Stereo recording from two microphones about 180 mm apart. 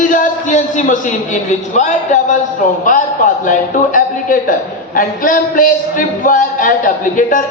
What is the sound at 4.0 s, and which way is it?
A man's voice, 50° left (ahead or behind).